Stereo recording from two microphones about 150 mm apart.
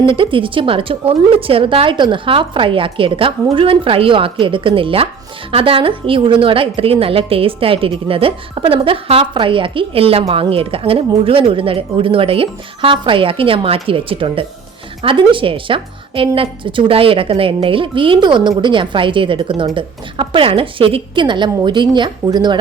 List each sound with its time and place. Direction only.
0.1 s a woman's voice: 35° right (ahead or behind)